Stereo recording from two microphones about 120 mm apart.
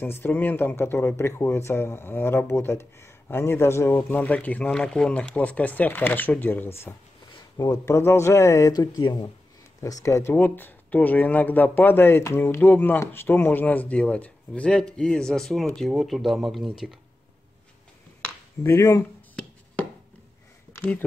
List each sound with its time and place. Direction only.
0.0 s speech: 15° left (ahead or behind)
7.3 s speech: 35° left (ahead or behind); by 16.9 s centre (ahead or behind)
18.6 s speech: 25° left (ahead or behind)
20.7 s a sound: 15° left (ahead or behind)